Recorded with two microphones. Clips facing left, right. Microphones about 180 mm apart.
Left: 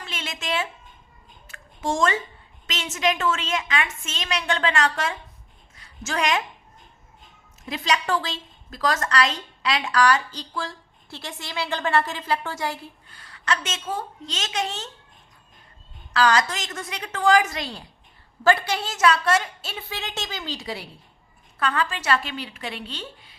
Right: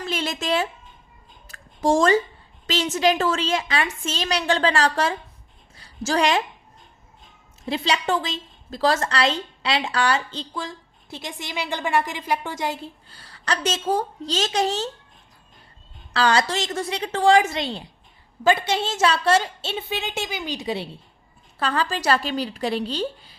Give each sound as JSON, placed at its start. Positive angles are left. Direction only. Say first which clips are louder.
{"t": 0.0, "sound": "a sound", "louder": "right 7 dB", "side_deg": -40}
{"t": 2.6, "sound": "a woman's voice", "louder": "right 5 dB", "side_deg": -35}
{"t": 5.7, "sound": "a sound", "louder": "right 6 dB", "side_deg": -35}
{"t": 7.6, "sound": "a woman's voice", "louder": "right 2 dB", "side_deg": -30}
{"t": 13.1, "sound": "a woman's voice", "louder": "left 1 dB", "side_deg": -35}
{"t": 16.1, "sound": "a woman's voice", "louder": "right 1 dB", "side_deg": -30}
{"t": 21.6, "sound": "a woman's voice", "louder": "right 2 dB", "side_deg": -35}